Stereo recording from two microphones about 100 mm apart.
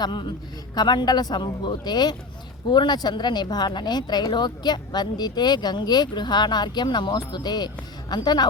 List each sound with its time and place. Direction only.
0.0 s speech: 50° left (ahead or behind)